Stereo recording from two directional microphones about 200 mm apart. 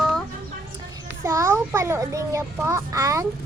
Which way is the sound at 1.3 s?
15° right (ahead or behind).